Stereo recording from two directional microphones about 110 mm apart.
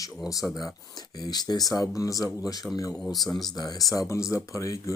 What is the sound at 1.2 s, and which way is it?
Speech, 40° left (ahead or behind).